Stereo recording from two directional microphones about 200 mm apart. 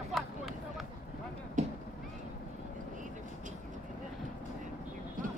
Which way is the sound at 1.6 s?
40° right (ahead or behind).